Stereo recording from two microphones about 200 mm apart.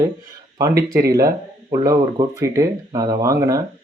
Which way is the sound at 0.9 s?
15° right (ahead or behind).